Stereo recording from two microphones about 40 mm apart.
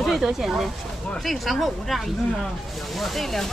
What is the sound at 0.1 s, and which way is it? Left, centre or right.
Speech, centre.